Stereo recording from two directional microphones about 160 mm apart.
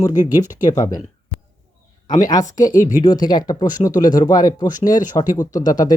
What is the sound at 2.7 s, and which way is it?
Speech, 55° left (ahead or behind).